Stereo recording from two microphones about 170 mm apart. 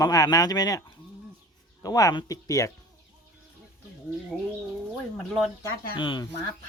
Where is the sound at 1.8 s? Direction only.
20° left (ahead or behind).